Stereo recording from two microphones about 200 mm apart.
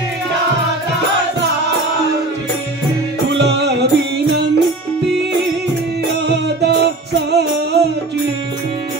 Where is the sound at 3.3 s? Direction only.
55° right (ahead or behind).